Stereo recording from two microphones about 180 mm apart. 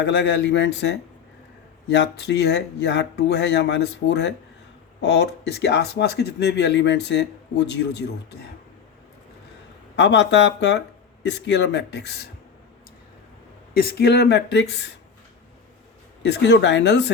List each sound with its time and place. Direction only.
0.0 s speech: 75° left (ahead or behind)
9.9 s speech: 75° left (ahead or behind)
13.7 s speech: 65° left (ahead or behind)
16.2 s speech: 70° left (ahead or behind)